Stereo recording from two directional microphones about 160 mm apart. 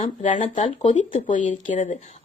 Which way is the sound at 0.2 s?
50° left (ahead or behind).